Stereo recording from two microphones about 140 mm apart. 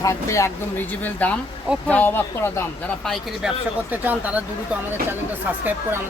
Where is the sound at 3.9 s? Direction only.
10° right (ahead or behind).